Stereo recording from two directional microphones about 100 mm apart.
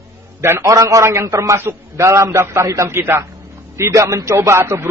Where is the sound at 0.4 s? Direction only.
30° right (ahead or behind).